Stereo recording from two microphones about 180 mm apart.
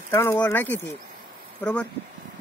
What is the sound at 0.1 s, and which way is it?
Speech, 15° left (ahead or behind).